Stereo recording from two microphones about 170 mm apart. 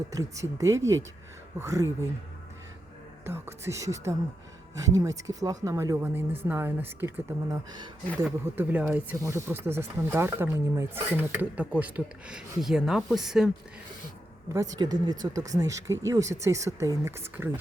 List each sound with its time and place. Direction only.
0.1 s speech: 20° right (ahead or behind)
3.2 s speech: 15° right (ahead or behind)
8.5 s speech: 10° right (ahead or behind)
14.5 s speech: 20° right (ahead or behind)